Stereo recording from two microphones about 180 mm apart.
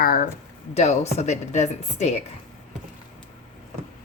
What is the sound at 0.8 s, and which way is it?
A woman's voice, 35° left (ahead or behind).